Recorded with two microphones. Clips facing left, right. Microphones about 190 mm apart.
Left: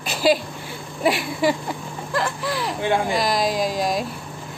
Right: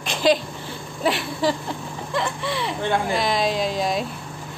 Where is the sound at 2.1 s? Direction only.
Centre (ahead or behind).